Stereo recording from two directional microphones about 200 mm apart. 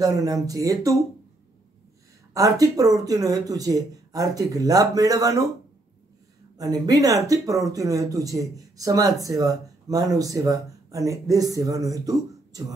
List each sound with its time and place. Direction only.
0.0 s speech: 15° right (ahead or behind)
2.3 s speech: 15° right (ahead or behind)
6.6 s speech: 15° right (ahead or behind)